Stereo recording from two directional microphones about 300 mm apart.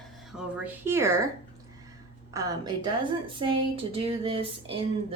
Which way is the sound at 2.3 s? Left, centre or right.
Centre.